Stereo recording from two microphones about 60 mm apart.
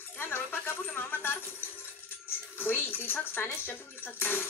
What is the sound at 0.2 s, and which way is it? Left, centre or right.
Speech, left.